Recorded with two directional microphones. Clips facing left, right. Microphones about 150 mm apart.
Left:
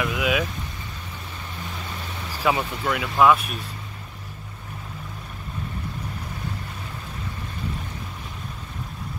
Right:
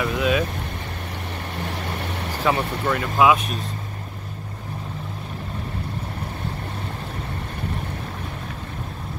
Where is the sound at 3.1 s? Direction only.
5° right (ahead or behind).